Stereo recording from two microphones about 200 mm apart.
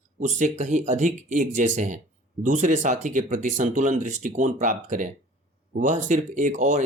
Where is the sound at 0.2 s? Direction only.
35° right (ahead or behind).